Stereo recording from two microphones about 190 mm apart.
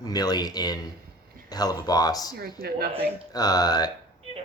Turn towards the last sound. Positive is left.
turn(degrees=20)  # may be behind; listen again after turning